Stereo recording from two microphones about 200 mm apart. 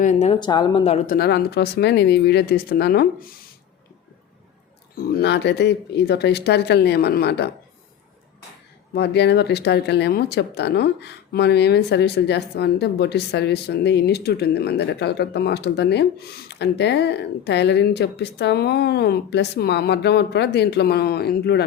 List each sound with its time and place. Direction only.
0.0 s speech: 35° left (ahead or behind)
0.3 s speech: 20° left (ahead or behind)
1.1 s speech: 55° left (ahead or behind)
4.9 s speech: 55° left (ahead or behind)
8.9 s speech: 55° left (ahead or behind)